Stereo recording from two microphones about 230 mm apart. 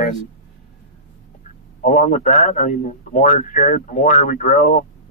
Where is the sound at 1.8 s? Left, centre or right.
Left.